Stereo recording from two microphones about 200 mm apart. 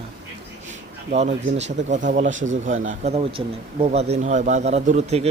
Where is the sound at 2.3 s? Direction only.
70° right (ahead or behind).